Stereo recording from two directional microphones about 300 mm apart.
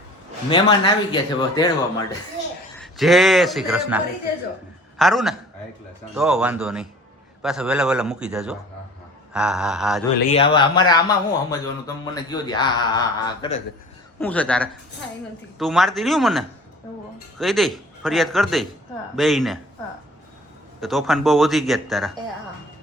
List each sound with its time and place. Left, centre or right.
0.5 s speech: centre
2.8 s speech: centre
10.2 s speech: left; by 19.5 s centre
20.8 s speech: centre